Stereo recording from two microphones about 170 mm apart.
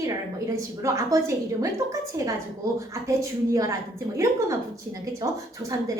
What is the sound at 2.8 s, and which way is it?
A woman's voice, 20° right (ahead or behind).